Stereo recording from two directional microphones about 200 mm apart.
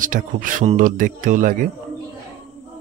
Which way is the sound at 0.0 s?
40° right (ahead or behind).